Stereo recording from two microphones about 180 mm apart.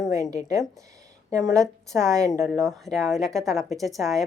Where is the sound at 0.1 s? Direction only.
20° right (ahead or behind).